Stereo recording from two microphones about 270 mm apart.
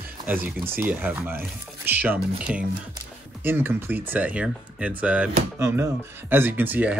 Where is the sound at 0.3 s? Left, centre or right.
Centre.